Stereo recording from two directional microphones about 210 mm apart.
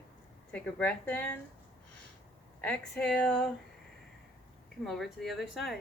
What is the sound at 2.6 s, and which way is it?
Speech, 5° left (ahead or behind).